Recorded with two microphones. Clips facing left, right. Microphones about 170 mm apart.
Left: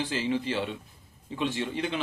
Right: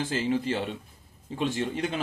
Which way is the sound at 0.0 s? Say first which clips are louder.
Right 2 dB; 45° right (ahead or behind).